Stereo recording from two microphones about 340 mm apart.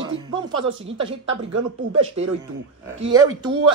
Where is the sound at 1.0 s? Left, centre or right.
Right.